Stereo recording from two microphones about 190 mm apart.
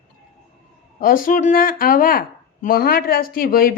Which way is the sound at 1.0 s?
45° left (ahead or behind).